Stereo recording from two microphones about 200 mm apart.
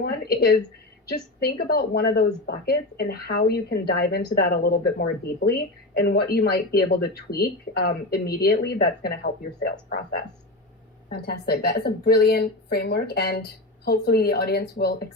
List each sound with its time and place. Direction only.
0.0 s a woman's voice: 50° left (ahead or behind)
11.1 s a woman's voice: 55° left (ahead or behind)